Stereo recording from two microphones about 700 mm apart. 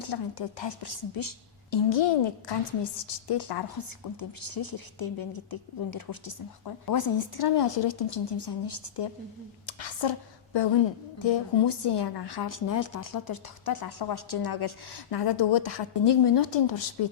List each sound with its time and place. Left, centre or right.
0.0 s a woman's voice: left
9.6 s a sound: left
11.2 s a woman's voice: left